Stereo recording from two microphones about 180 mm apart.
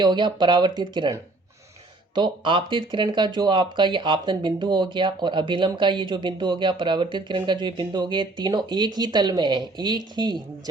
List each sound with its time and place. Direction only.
0.0 s speech: 25° right (ahead or behind)